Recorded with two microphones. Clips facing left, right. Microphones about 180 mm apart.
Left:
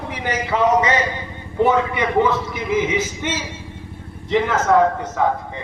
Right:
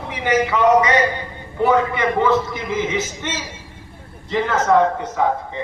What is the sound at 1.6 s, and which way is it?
A man's voice, 20° left (ahead or behind).